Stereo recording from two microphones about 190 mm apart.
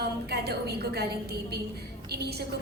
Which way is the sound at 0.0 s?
55° right (ahead or behind).